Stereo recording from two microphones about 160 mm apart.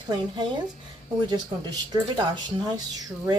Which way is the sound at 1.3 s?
25° right (ahead or behind).